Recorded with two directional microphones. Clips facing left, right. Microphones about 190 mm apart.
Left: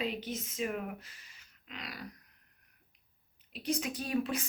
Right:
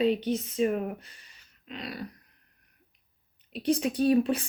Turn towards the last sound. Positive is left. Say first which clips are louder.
# right 10 dB
turn(degrees=-30)  # may be behind; listen again after turning